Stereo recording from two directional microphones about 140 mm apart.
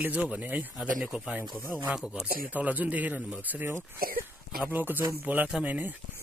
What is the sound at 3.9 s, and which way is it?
Throat clearing, 90° right.